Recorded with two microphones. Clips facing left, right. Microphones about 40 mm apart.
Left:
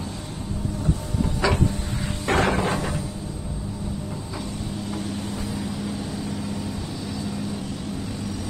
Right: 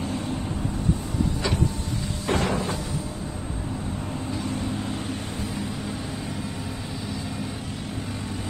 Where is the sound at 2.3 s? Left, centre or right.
Left.